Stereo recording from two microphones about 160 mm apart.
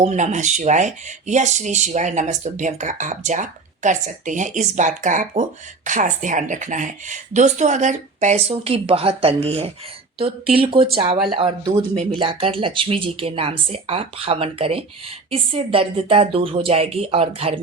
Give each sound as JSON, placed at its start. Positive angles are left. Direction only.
{"t": 0.0, "sound": "speech", "side_deg": -50}